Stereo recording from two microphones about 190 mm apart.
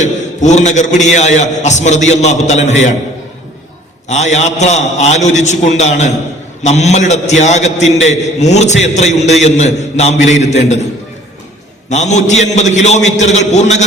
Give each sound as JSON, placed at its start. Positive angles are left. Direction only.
{"t": 0.0, "sound": "a man's voice", "side_deg": 40}
{"t": 4.1, "sound": "a man's voice", "side_deg": 35}
{"t": 11.9, "sound": "a man's voice", "side_deg": 35}